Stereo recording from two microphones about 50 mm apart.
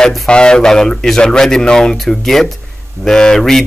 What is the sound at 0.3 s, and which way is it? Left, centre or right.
Speech, centre.